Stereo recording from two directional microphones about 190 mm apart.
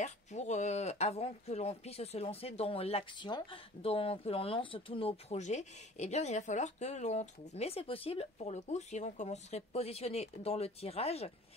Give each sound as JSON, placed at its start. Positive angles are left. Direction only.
{"t": 0.0, "sound": "speech", "side_deg": 35}